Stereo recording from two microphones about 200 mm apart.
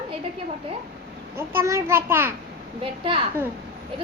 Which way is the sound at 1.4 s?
10° right (ahead or behind).